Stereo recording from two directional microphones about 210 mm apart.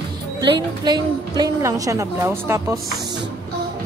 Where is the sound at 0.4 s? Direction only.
20° right (ahead or behind).